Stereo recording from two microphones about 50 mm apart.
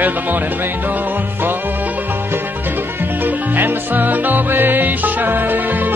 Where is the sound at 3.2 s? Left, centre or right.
Right.